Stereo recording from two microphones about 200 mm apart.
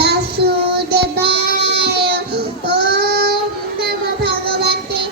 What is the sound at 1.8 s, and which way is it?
Child singing, 55° right (ahead or behind).